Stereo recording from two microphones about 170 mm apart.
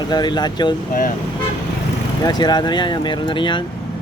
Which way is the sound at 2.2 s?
25° left (ahead or behind).